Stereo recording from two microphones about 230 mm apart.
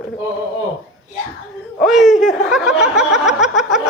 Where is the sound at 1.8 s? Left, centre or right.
Centre.